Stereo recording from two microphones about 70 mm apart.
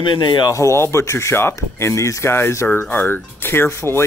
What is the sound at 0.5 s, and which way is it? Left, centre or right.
Speech, left.